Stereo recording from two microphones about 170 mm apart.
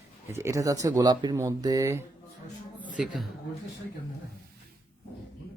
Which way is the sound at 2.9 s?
5° right (ahead or behind).